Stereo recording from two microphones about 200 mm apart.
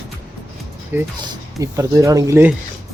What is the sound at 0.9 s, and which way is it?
Speech, 10° right (ahead or behind).